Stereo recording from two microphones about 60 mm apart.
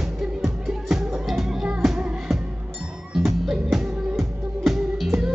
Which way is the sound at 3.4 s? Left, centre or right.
Centre.